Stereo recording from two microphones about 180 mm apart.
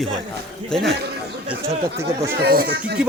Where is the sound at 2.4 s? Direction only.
55° right (ahead or behind).